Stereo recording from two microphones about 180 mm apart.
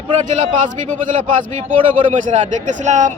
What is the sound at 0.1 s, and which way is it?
Speech, 40° right (ahead or behind).